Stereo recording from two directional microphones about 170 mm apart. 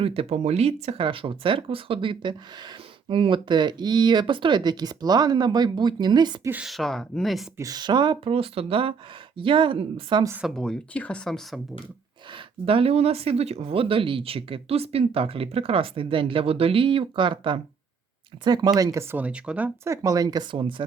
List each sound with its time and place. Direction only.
0.0 s speech: 35° right (ahead or behind)
6.5 s speech: 5° right (ahead or behind)
7.6 s speech: 25° right (ahead or behind)
10.5 s speech: 5° left (ahead or behind)
12.3 s speech: 30° right (ahead or behind)